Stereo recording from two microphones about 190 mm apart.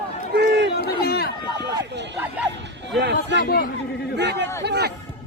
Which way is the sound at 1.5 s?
65° right (ahead or behind).